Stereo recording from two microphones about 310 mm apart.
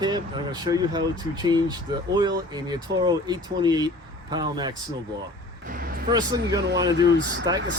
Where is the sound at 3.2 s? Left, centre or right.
Centre.